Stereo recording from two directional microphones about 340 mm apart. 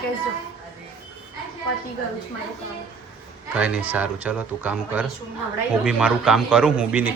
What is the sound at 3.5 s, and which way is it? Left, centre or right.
Speech, centre.